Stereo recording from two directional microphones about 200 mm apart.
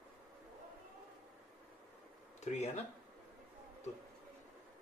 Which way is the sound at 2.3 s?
35° left (ahead or behind).